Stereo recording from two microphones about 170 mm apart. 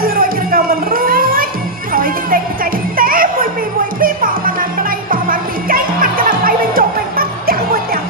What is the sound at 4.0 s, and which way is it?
Music, 55° right (ahead or behind).